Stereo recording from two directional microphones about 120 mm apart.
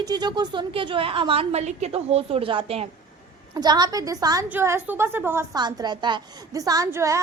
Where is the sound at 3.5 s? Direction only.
35° right (ahead or behind).